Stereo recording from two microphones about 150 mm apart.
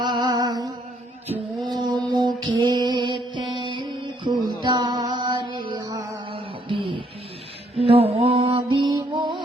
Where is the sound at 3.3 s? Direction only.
30° right (ahead or behind).